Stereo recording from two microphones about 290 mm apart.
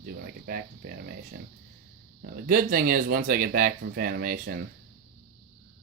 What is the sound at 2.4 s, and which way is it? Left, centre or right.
Speech, right.